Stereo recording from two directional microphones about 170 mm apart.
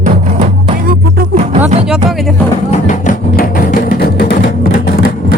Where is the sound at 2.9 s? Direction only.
50° left (ahead or behind); by 4.9 s 85° left.